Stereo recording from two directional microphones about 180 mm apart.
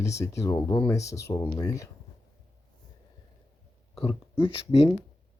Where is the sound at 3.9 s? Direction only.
30° left (ahead or behind).